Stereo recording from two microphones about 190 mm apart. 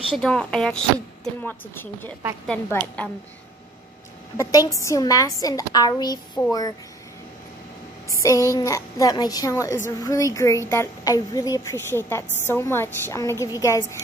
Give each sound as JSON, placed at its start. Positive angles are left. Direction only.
{"t": 0.1, "sound": "a woman's voice", "side_deg": 5}
{"t": 4.4, "sound": "a woman's voice", "side_deg": 20}
{"t": 8.1, "sound": "a woman's voice", "side_deg": 15}